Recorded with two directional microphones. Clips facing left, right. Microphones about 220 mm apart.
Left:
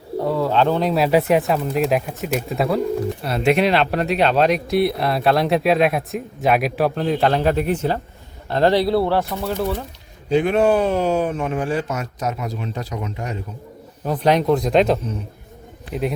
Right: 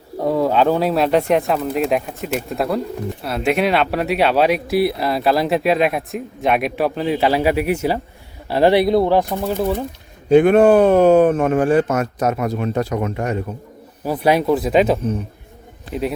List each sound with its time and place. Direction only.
0.3 s speech: 15° right (ahead or behind)
10.2 s speech: 55° right (ahead or behind)
14.0 s speech: 10° right (ahead or behind)